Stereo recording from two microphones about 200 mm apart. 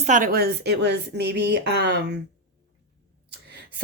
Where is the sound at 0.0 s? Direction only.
40° right (ahead or behind); by 2.2 s 55° right (ahead or behind).